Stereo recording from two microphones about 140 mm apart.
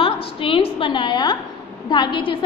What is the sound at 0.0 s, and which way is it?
A woman's voice, 40° left (ahead or behind).